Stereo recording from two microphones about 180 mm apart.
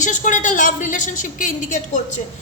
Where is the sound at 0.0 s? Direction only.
45° left (ahead or behind).